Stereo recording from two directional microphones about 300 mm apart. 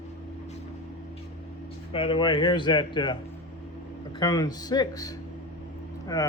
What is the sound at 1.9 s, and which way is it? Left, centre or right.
A man's voice, centre.